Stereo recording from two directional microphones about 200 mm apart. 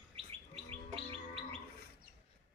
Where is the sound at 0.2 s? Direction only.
30° right (ahead or behind).